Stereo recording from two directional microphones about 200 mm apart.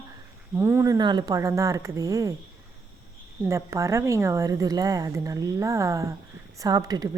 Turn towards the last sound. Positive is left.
turn(degrees=-20)  # may be behind; listen again after turning